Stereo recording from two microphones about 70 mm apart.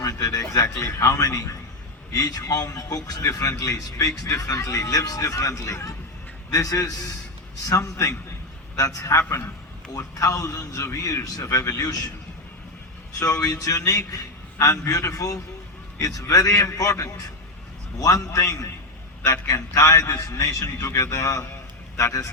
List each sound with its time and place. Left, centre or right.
0.0 s a man's voice: left
7.8 s a man's voice: left
13.1 s a man's voice: left